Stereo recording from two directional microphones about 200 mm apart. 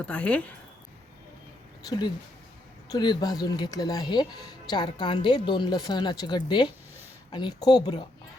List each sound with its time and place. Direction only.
0.0 s speech: 5° left (ahead or behind)
2.9 s speech: 20° left (ahead or behind)